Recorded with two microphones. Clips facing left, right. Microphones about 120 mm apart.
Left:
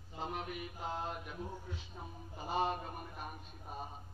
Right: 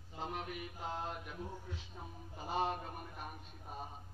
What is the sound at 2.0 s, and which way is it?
Speech, 15° left (ahead or behind).